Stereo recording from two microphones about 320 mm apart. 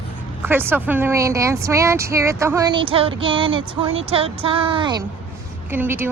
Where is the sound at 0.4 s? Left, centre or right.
Centre.